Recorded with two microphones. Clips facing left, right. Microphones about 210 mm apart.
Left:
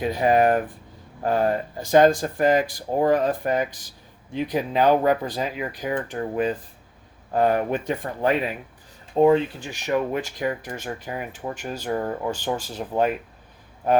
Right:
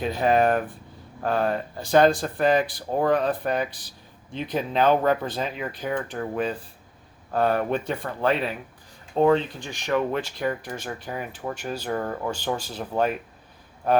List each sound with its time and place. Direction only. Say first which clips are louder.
0.0 s speech: left 2 dB; 15° left (ahead or behind)